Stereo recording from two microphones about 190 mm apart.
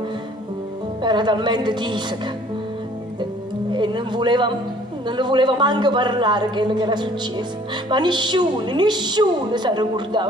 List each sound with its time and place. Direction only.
1.0 s a man's voice: 25° right (ahead or behind)
3.7 s a man's voice: 25° right (ahead or behind)